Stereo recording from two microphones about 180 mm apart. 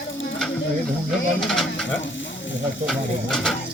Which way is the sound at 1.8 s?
90° left.